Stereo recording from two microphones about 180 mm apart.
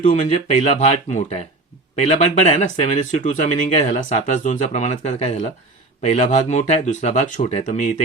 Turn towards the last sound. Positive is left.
turn(degrees=40)  # may be behind; listen again after turning